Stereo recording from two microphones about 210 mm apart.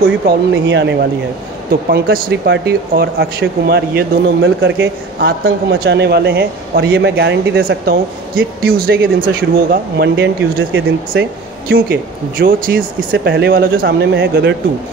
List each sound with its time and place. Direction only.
0.0 s speech: 60° right (ahead or behind)
1.7 s speech: 45° right (ahead or behind)
11.7 s speech: 45° right (ahead or behind)